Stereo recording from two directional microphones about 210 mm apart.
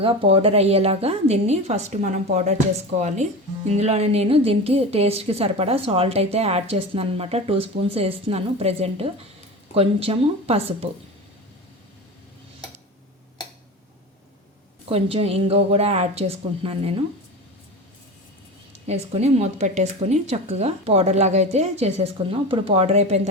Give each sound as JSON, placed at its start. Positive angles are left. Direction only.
{"t": 0.0, "sound": "a woman's voice", "side_deg": -25}
{"t": 3.7, "sound": "a woman's voice", "side_deg": -30}
{"t": 14.8, "sound": "a woman's voice", "side_deg": -25}
{"t": 18.9, "sound": "speech", "side_deg": -30}